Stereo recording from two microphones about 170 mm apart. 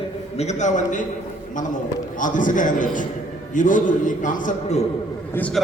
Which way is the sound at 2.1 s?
50° left (ahead or behind).